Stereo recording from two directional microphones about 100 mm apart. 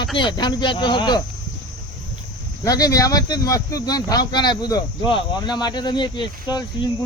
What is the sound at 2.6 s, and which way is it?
Speech, 40° left (ahead or behind).